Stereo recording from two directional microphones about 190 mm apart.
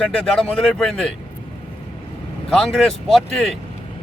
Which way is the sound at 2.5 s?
Centre (ahead or behind).